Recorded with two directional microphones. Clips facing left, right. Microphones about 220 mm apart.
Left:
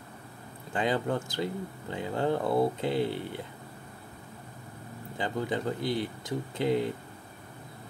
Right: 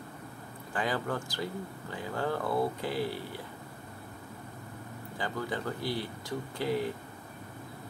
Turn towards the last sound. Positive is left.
turn(degrees=20)  # may be behind; listen again after turning